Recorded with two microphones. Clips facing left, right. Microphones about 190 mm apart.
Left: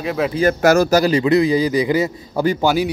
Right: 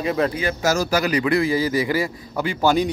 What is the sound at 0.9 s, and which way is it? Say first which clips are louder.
A man's voice: left 5 dB; 35° left (ahead or behind).